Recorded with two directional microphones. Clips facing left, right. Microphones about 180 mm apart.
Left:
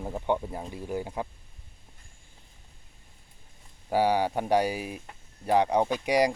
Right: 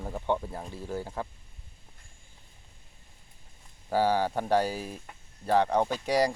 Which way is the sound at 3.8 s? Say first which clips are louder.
Left 1 dB; 15° left (ahead or behind).